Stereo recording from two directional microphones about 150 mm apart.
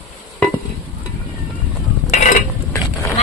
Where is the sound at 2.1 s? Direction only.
55° left (ahead or behind).